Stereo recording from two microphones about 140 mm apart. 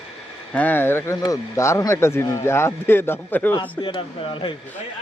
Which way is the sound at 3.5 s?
35° left (ahead or behind).